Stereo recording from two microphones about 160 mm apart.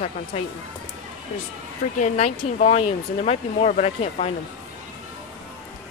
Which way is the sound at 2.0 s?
45° left (ahead or behind).